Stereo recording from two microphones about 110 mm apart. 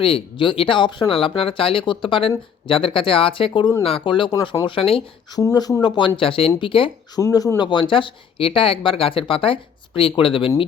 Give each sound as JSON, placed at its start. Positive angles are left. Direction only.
{"t": 0.0, "sound": "speech", "side_deg": 50}
{"t": 5.3, "sound": "speech", "side_deg": 35}
{"t": 7.2, "sound": "speech", "side_deg": 30}
{"t": 7.7, "sound": "speech", "side_deg": 50}